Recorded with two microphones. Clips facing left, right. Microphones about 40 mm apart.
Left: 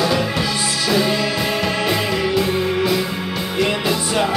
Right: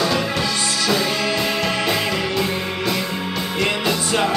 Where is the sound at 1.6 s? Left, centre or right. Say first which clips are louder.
Left 1 dB; centre.